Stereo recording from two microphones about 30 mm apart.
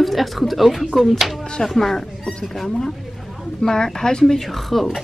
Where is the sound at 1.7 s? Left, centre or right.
Centre.